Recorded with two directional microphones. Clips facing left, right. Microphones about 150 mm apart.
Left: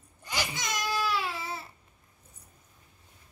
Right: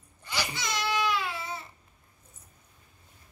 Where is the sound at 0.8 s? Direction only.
5° left (ahead or behind).